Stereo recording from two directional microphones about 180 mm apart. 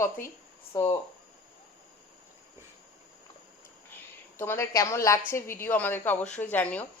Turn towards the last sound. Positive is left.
turn(degrees=10)  # may be behind; listen again after turning